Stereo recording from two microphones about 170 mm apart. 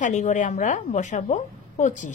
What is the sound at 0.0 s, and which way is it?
A woman's voice, 45° left (ahead or behind).